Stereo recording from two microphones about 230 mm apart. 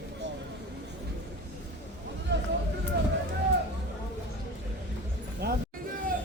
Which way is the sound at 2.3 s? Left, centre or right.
Right.